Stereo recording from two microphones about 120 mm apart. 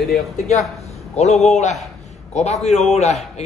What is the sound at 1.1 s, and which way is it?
A man's voice, 65° left (ahead or behind).